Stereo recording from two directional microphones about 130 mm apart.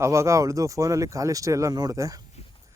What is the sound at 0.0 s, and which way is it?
Speech, 20° right (ahead or behind).